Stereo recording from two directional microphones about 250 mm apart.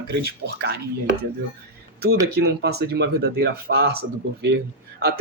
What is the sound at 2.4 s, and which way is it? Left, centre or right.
Speech, right.